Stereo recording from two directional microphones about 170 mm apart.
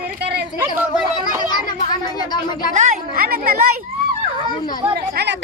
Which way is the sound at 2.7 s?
55° right (ahead or behind).